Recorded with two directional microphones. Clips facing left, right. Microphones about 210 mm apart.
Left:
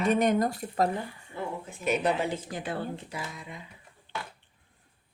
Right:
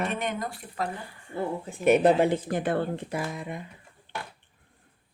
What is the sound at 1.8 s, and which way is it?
Speech, 55° right (ahead or behind).